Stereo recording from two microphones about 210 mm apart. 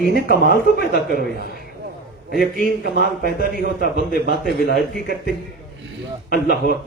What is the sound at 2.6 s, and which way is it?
Speech, 50° left (ahead or behind).